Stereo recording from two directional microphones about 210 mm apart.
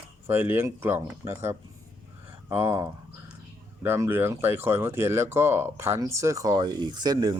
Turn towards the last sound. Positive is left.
turn(degrees=-20)  # may be behind; listen again after turning